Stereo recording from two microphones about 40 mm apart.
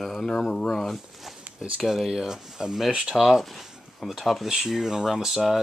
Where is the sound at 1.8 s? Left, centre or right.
Centre.